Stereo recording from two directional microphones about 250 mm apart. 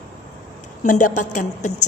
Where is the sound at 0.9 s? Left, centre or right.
Left.